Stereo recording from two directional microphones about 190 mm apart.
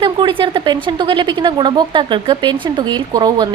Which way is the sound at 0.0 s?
25° right (ahead or behind).